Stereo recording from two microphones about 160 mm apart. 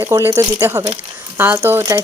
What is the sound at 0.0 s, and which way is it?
Speech, 15° right (ahead or behind).